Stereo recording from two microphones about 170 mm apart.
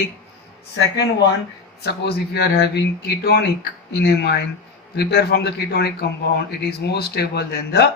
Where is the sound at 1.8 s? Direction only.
70° left (ahead or behind).